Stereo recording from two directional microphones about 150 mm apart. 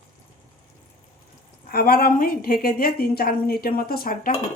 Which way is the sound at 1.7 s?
85° left.